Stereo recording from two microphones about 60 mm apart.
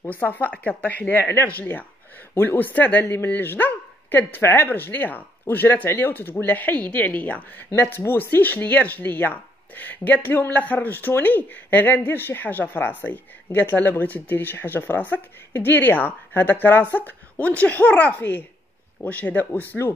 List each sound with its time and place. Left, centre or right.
0.0 s speech: left
7.8 s speech: left